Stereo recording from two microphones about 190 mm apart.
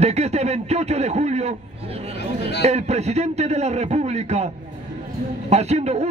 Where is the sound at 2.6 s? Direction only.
35° right (ahead or behind).